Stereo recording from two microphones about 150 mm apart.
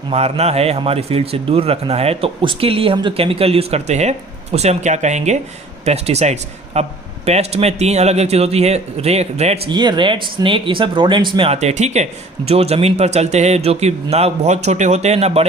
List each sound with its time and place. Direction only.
0.1 s a man's voice: 45° right (ahead or behind)
9.6 s a man's voice: 30° right (ahead or behind)